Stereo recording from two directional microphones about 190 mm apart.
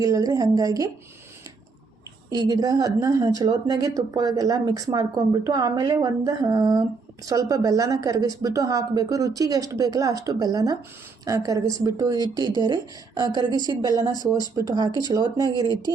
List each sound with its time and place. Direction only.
0.0 s speech: 20° right (ahead or behind)
2.3 s a woman's voice: 20° right (ahead or behind)
14.1 s speech: 20° left (ahead or behind)
14.5 s speech: 20° right (ahead or behind)